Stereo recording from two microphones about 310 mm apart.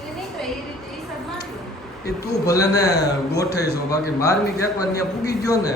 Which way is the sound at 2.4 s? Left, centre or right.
Centre.